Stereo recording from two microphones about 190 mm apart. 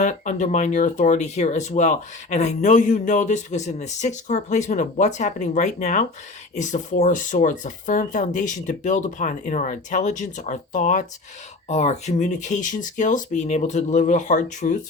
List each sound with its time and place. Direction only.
0.0 s speech: 40° left (ahead or behind)